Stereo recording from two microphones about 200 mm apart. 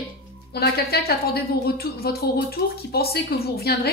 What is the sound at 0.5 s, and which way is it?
A woman's voice, 50° left (ahead or behind).